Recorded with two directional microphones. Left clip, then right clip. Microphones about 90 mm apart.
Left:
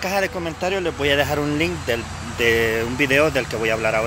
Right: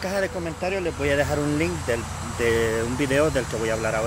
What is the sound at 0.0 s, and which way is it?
Speech, 20° right (ahead or behind).